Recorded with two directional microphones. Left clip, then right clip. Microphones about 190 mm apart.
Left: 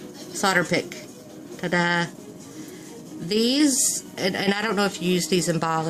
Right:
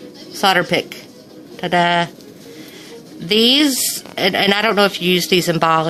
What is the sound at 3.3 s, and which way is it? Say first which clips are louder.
Speech: right 8 dB; 30° right (ahead or behind).